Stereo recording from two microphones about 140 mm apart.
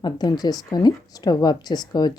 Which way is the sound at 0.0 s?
30° left (ahead or behind).